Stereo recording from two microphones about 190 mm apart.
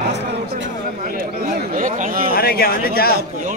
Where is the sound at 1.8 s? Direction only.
50° right (ahead or behind).